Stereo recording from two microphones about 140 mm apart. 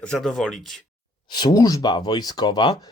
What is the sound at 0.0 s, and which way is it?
Speech, 5° left (ahead or behind).